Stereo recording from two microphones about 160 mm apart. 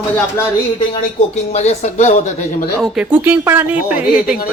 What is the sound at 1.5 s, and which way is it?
Speech, 45° left (ahead or behind).